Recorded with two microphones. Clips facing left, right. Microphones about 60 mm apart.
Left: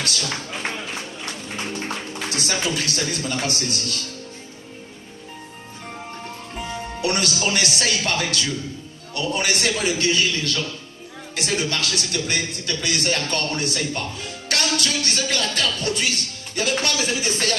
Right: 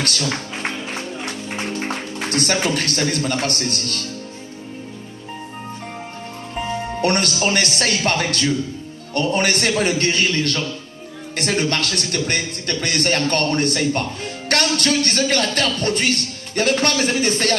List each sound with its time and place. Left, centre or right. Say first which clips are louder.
0.0 s speech: right 4 dB; right
0.6 s music: right 3 dB; right
2.3 s speech: right 5 dB; right
6.6 s speech: right 6 dB; right